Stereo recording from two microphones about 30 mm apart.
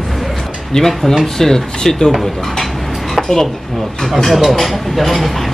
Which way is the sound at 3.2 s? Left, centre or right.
Centre.